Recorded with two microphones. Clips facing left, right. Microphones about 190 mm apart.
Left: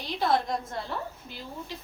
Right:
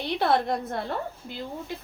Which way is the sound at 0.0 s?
60° right (ahead or behind).